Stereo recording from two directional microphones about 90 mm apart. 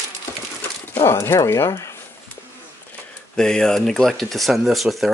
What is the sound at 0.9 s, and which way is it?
Speech, 30° left (ahead or behind).